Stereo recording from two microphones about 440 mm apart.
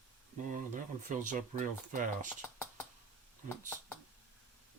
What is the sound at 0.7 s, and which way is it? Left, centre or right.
Speech, centre.